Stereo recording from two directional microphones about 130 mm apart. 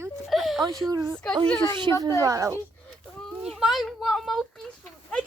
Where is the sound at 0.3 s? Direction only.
Centre (ahead or behind).